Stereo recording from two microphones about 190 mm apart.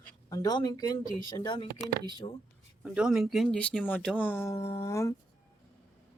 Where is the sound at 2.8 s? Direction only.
5° right (ahead or behind); by 5.1 s 15° left (ahead or behind).